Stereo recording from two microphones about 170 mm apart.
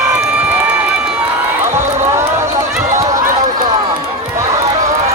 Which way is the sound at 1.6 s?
15° right (ahead or behind).